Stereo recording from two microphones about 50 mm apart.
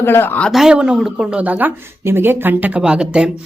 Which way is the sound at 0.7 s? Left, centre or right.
Centre.